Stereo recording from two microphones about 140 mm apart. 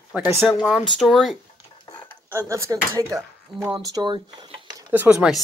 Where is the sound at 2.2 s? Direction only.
20° right (ahead or behind).